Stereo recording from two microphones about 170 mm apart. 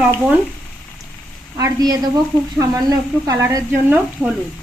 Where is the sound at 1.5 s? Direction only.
20° right (ahead or behind).